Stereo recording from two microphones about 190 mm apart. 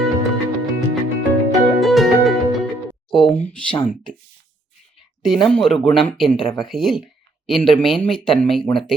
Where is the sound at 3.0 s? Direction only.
5° left (ahead or behind).